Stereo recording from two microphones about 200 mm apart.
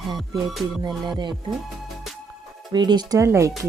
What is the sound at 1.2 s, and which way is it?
Speech, 20° right (ahead or behind).